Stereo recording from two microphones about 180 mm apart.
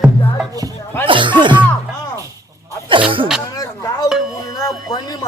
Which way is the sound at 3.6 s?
20° left (ahead or behind).